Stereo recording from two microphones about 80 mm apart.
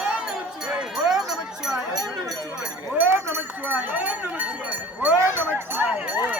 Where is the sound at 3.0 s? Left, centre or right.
Right.